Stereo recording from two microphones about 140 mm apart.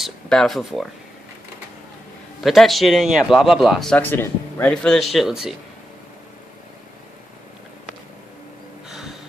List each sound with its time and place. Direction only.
0.0 s speech: centre (ahead or behind)
2.4 s speech: centre (ahead or behind)
3.9 s speech: 15° left (ahead or behind); by 5.5 s 5° right (ahead or behind)
8.8 s a sound: 5° right (ahead or behind)